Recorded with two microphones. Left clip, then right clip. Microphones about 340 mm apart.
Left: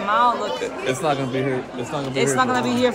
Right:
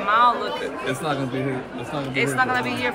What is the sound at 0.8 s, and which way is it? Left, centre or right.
Speech, left.